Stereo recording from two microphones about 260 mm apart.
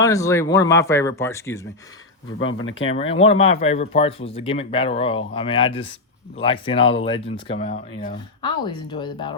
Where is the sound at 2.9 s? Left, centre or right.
Left.